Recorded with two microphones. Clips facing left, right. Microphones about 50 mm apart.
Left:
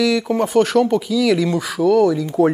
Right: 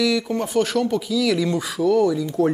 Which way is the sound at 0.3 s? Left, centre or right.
Centre.